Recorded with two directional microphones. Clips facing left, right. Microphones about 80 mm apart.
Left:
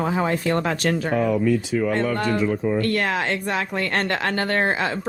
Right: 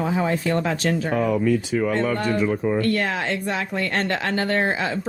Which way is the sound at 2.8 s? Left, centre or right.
Left.